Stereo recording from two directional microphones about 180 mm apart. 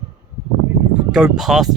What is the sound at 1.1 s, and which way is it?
Speech, 5° right (ahead or behind).